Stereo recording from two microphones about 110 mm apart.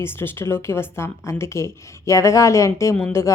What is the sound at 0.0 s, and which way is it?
Speech, 20° left (ahead or behind).